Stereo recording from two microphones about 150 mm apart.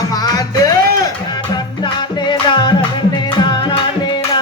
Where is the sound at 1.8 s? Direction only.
30° left (ahead or behind).